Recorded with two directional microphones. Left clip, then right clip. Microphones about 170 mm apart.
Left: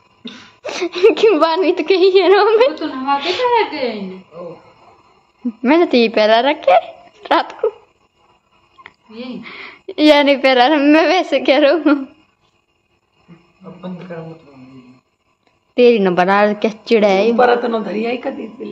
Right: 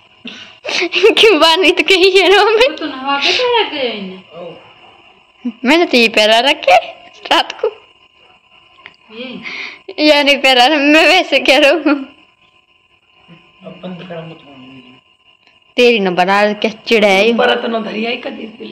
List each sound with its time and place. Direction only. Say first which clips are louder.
0.6 s a woman's voice: right 3 dB; 5° left (ahead or behind)
5.4 s speech: right 2 dB; 10° left (ahead or behind)
8.8 s speech: right 3 dB; 5° left (ahead or behind)
9.8 s a woman's voice: right 1 dB; 20° left (ahead or behind)
15.7 s a woman's voice: right 1 dB; 15° left (ahead or behind)
17.4 s a man's voice: even; 85° left